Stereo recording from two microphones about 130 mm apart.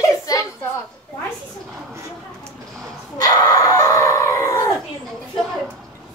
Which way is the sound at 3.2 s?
30° left (ahead or behind).